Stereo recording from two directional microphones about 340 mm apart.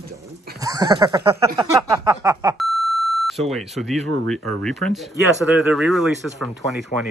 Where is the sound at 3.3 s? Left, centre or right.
Centre.